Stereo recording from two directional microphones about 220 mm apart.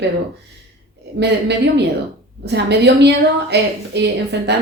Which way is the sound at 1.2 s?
50° right (ahead or behind).